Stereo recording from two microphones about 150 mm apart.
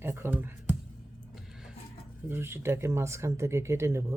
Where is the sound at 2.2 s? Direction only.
15° right (ahead or behind).